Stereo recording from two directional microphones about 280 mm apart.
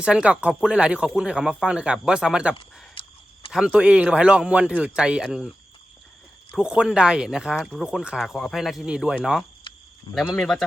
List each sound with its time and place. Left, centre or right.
0.0 s speech: centre
2.9 s a sound: centre
3.5 s speech: centre
6.5 s speech: centre
9.7 s cricket: centre
10.2 s speech: centre